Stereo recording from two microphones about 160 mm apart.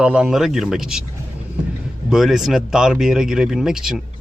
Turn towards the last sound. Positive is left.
turn(degrees=-5)  # may be behind; listen again after turning